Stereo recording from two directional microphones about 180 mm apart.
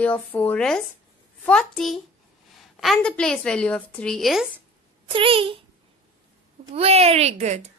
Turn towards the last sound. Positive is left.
turn(degrees=-40)  # may be behind; listen again after turning